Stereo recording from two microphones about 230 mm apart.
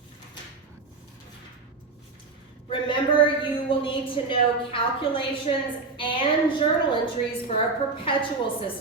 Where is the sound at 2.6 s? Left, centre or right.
Left.